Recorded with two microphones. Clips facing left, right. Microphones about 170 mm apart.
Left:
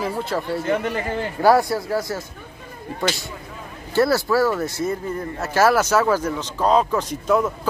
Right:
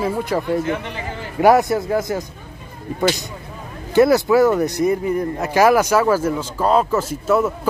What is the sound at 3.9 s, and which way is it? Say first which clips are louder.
Speech: right 5 dB; 20° right (ahead or behind).